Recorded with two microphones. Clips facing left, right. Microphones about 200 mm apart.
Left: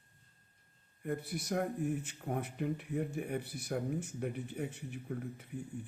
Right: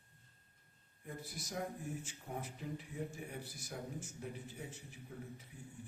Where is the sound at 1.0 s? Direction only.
60° left (ahead or behind).